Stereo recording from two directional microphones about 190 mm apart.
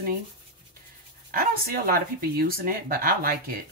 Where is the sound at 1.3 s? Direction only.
50° right (ahead or behind).